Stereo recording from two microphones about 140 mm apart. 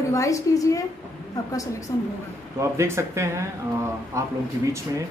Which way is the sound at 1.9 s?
25° left (ahead or behind).